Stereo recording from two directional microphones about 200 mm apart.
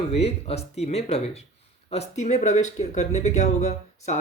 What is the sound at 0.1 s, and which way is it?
Speech, 30° left (ahead or behind).